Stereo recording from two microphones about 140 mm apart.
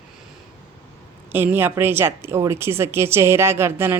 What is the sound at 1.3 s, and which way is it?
A woman's voice, 15° right (ahead or behind).